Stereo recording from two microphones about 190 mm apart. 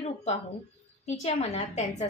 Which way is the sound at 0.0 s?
35° left (ahead or behind).